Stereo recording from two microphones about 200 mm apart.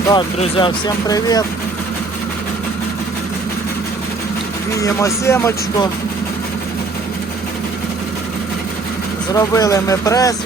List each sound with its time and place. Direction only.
0.1 s speech: 25° left (ahead or behind)
4.8 s speech: 15° left (ahead or behind)
9.3 s speech: 15° left (ahead or behind)